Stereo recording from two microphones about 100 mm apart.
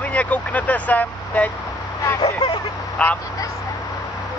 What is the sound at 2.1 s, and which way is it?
Speech, 35° left (ahead or behind).